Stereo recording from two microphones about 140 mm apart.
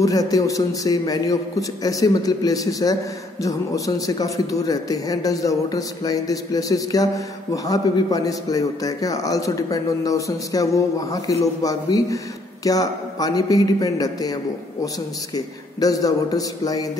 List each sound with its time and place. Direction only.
0.0 s a man's voice: 25° left (ahead or behind)